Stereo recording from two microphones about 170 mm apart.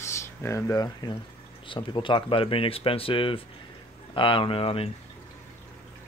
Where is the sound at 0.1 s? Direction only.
15° left (ahead or behind); by 4.9 s 35° left (ahead or behind).